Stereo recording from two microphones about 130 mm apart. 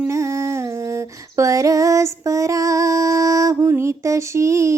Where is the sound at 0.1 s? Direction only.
20° right (ahead or behind).